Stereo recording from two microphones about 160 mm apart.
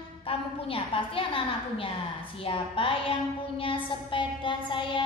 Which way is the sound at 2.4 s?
35° left (ahead or behind).